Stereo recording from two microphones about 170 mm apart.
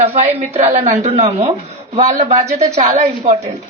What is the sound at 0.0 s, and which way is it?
A man's voice, 35° right (ahead or behind).